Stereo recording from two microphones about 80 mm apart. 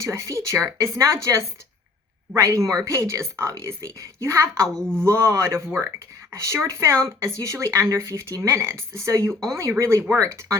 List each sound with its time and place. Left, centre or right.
0.0 s speech: right
4.7 s speech: centre
4.9 s speech: right